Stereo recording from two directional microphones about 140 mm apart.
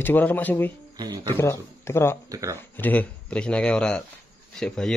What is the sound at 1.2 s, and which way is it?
Speech, 15° left (ahead or behind).